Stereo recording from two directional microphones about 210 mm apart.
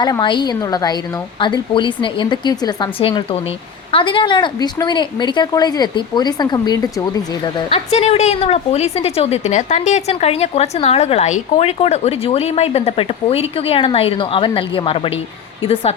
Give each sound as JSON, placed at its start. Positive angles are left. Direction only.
{"t": 0.0, "sound": "a woman's voice", "side_deg": 20}
{"t": 7.9, "sound": "a woman's voice", "side_deg": 30}